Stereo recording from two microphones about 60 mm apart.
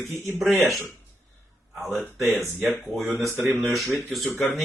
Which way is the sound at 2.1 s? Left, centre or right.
Centre.